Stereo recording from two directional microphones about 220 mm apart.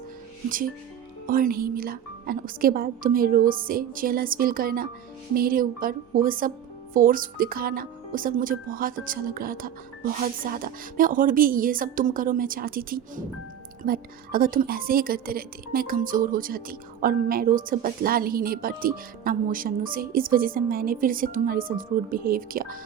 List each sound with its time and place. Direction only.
0.4 s a woman's voice: 40° right (ahead or behind)